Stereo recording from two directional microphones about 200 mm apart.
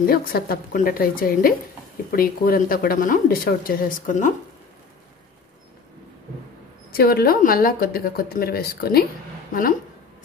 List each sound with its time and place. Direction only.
0.0 s speech: 50° left (ahead or behind)
6.9 s a woman's voice: 50° left (ahead or behind)